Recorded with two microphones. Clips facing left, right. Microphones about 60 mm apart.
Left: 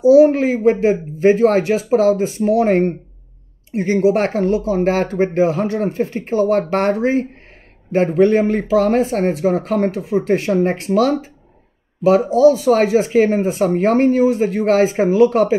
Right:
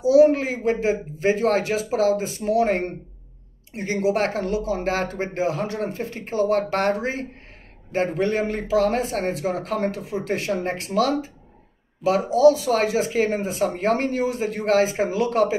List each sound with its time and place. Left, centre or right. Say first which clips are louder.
0.1 s speech: left 4 dB; left
12.6 s speech: left 7 dB; left